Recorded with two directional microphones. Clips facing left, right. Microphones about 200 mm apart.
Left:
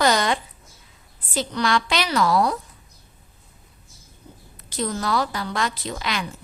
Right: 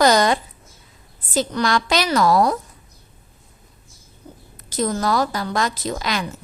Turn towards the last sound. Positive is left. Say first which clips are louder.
# right 4 dB
turn(degrees=-40)  # may be behind; listen again after turning